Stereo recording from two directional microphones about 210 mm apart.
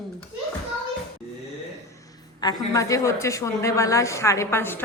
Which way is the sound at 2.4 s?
15° left (ahead or behind).